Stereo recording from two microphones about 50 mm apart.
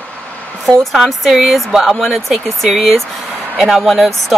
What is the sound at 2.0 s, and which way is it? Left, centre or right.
Speech, centre.